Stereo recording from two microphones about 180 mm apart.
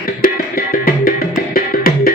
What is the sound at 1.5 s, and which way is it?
Music, 55° left (ahead or behind).